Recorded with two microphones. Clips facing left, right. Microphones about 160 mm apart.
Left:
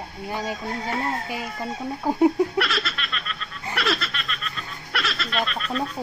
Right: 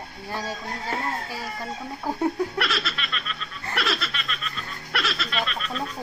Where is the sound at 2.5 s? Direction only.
Centre (ahead or behind).